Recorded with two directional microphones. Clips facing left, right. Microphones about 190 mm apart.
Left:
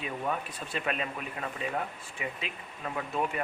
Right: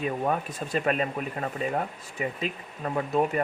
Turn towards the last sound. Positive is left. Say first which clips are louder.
# right 7 dB
turn(degrees=-40)  # may be behind; listen again after turning